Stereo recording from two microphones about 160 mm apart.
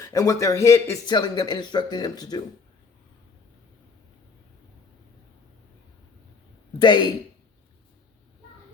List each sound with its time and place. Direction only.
0.0 s speech: 20° left (ahead or behind)
6.7 s speech: 30° left (ahead or behind)